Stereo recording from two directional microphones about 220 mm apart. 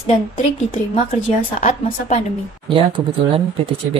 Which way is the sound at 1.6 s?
35° left (ahead or behind).